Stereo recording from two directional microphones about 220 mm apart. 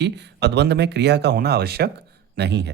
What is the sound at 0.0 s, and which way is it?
Speech, 50° right (ahead or behind).